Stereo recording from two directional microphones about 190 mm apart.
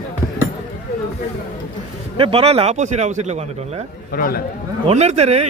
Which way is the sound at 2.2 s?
30° right (ahead or behind).